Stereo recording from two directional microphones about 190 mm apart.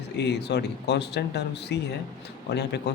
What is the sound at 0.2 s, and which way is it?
Speech, 60° left (ahead or behind).